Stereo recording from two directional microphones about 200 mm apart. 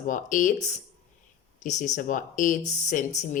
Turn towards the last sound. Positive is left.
turn(degrees=35)  # may be behind; listen again after turning